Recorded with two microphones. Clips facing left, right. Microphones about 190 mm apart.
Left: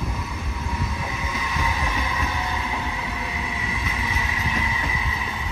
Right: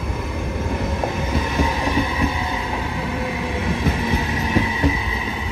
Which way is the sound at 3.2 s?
55° right (ahead or behind).